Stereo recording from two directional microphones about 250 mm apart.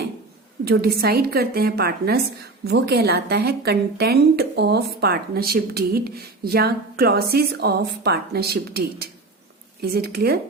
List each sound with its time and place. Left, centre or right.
0.6 s a woman's voice: right